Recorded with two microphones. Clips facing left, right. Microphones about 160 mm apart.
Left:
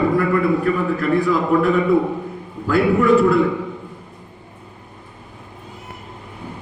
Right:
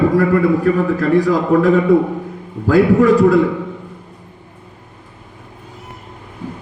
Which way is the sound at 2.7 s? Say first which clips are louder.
Right 4 dB; 40° right (ahead or behind).